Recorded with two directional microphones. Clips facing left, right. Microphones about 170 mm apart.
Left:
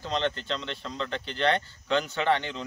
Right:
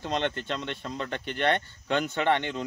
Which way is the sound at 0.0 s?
55° right (ahead or behind).